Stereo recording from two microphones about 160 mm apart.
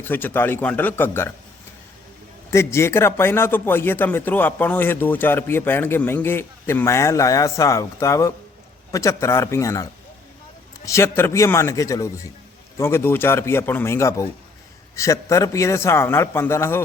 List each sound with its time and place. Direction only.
0.0 s speech: 10° left (ahead or behind)
2.5 s a man's voice: 15° left (ahead or behind)